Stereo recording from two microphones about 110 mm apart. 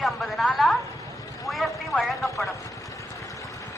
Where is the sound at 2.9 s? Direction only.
30° left (ahead or behind).